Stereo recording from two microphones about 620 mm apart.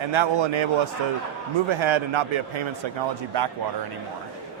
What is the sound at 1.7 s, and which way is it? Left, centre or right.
A man's voice, right.